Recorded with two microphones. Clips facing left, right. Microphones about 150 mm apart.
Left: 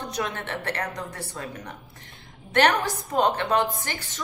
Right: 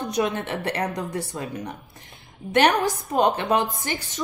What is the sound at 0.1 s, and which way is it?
A woman's voice, 15° right (ahead or behind).